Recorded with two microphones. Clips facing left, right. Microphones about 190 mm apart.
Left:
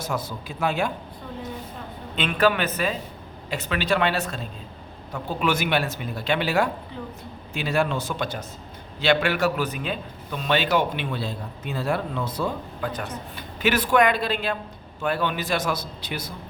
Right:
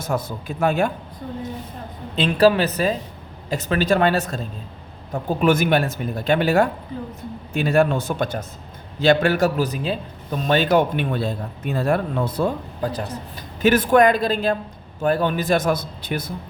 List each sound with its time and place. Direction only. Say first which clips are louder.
0.0 s a man's voice: right 4 dB; 50° right (ahead or behind)
2.1 s a man's voice: right 6 dB; 35° right (ahead or behind); by 12.5 s 55° right (ahead or behind)
12.8 s a man's voice: right 5 dB; 35° right (ahead or behind); by 16.3 s 55° right (ahead or behind)